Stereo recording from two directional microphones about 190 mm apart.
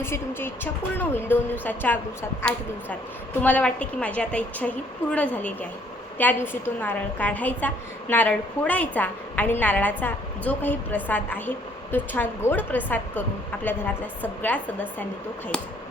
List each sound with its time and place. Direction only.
0.0 s a woman's voice: 10° left (ahead or behind)